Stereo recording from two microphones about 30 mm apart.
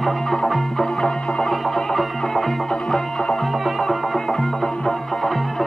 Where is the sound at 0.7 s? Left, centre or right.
Centre.